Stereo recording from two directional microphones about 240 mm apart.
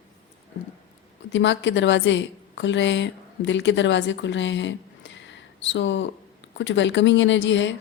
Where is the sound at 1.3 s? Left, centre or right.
Left.